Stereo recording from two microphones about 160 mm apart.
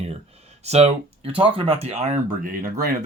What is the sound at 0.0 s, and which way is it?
Speech, 40° right (ahead or behind).